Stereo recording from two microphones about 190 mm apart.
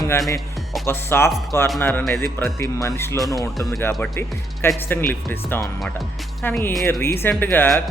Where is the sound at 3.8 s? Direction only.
10° left (ahead or behind).